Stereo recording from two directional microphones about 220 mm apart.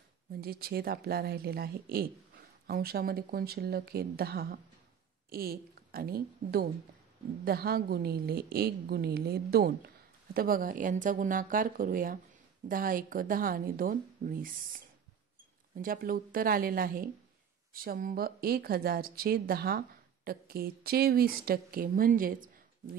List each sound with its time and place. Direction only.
0.3 s a woman's voice: 45° right (ahead or behind)
15.7 s a woman's voice: 40° right (ahead or behind)